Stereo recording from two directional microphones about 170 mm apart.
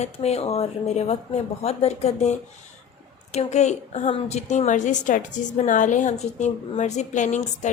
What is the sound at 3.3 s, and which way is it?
A woman's voice, 40° left (ahead or behind).